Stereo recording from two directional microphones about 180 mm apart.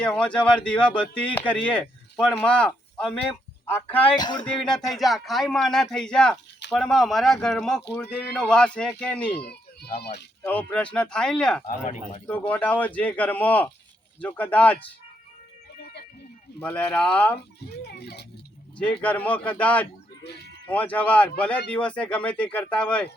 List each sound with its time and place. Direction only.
0.0 s speech: 5° left (ahead or behind)
4.2 s speech: 25° left (ahead or behind)
4.9 s speech: centre (ahead or behind)
9.4 s a sound: 60° left (ahead or behind)
10.0 s speech: 70° left (ahead or behind)
10.4 s speech: 10° left (ahead or behind)
11.6 s speech: 35° left (ahead or behind)
12.5 s speech: 10° left (ahead or behind)
15.8 s music: 65° left (ahead or behind)
16.6 s speech: 10° left (ahead or behind)
17.8 s speech: 65° left (ahead or behind)
18.8 s speech: 5° left (ahead or behind)